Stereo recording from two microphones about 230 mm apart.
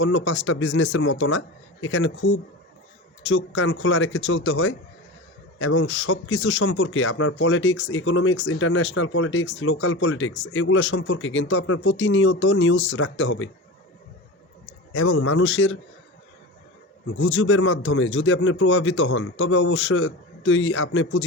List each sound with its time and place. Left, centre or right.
0.0 s speech: left
14.9 s speech: left
17.2 s speech: left